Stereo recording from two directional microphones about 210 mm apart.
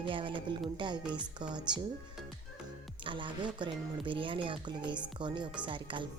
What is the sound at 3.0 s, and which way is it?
Speech, 25° right (ahead or behind).